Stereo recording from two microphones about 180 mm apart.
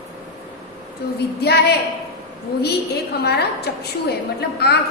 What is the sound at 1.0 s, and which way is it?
A woman's voice, 65° left (ahead or behind).